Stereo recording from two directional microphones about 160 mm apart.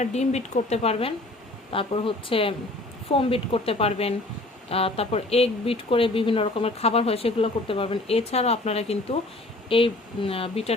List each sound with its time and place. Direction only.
0.0 s speech: 45° left (ahead or behind)